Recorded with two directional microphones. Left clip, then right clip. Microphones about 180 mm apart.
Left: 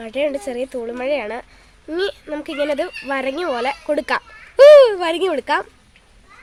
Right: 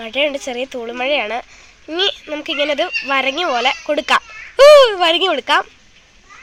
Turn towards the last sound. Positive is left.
turn(degrees=20)  # may be behind; listen again after turning